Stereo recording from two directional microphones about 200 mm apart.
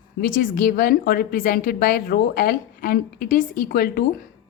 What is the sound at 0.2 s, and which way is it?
A woman's voice, 45° left (ahead or behind).